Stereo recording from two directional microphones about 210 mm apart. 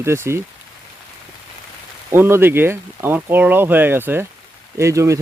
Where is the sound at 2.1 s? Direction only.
10° right (ahead or behind).